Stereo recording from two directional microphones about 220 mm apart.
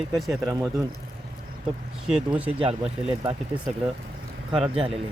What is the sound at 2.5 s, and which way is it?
Speech, 25° right (ahead or behind).